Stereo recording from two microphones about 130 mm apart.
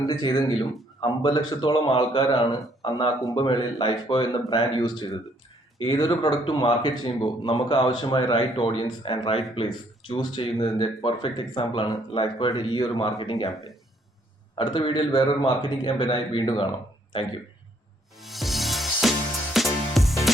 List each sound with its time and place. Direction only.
0.0 s speech: 30° left (ahead or behind)
2.5 s a man's voice: 30° left (ahead or behind)
14.5 s speech: 40° left (ahead or behind)
18.2 s music: centre (ahead or behind)